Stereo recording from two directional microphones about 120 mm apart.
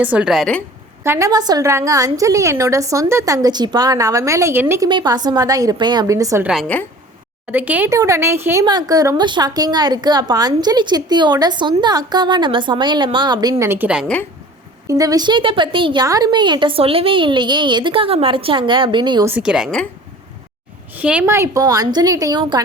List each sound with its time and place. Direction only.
0.0 s a woman's voice: 10° right (ahead or behind)
1.0 s a woman's voice: 20° right (ahead or behind)
1.3 s a woman's voice: 35° right (ahead or behind)
4.9 s a woman's voice: 35° right (ahead or behind)
6.4 s a woman's voice: 5° right (ahead or behind)
7.9 s a woman's voice: 25° right (ahead or behind)
8.6 s a woman's voice: 35° right (ahead or behind)
13.7 s a woman's voice: 15° right (ahead or behind)
14.8 s a woman's voice: 30° right (ahead or behind)
16.0 s a woman's voice: 30° right (ahead or behind)
19.4 s a woman's voice: 5° right (ahead or behind)
20.9 s a woman's voice: 15° right (ahead or behind)
21.3 s a woman's voice: 25° right (ahead or behind); by 22.6 s 40° right (ahead or behind)